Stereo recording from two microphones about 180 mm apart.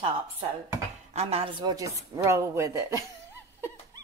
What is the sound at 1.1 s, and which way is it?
A woman's voice, 35° right (ahead or behind).